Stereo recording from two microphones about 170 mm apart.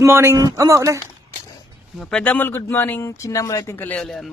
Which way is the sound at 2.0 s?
5° left (ahead or behind).